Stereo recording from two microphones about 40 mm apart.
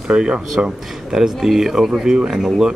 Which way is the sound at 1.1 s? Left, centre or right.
Centre.